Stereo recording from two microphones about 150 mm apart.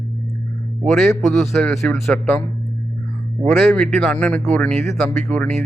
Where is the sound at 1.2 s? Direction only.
5° left (ahead or behind).